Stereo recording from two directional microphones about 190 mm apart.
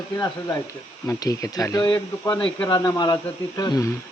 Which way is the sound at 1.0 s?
20° left (ahead or behind).